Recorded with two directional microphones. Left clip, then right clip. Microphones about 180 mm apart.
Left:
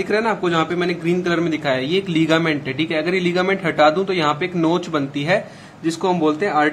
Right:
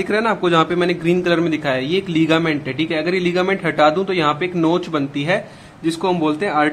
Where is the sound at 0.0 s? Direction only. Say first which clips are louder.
Right 1 dB; 20° right (ahead or behind).